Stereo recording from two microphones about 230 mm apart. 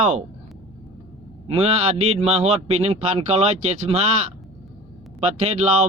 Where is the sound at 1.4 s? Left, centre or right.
Right.